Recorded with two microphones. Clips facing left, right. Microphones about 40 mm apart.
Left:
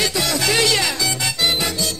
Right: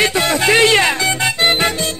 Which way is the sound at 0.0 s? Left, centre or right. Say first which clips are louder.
Right 6 dB; right.